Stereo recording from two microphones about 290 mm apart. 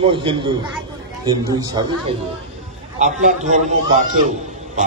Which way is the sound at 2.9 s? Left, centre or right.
Right.